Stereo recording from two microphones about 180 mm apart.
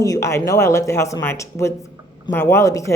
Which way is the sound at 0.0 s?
15° left (ahead or behind).